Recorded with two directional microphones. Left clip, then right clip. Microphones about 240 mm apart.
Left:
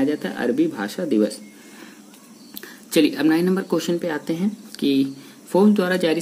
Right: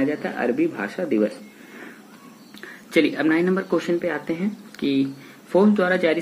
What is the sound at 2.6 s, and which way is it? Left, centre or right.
Speech, left.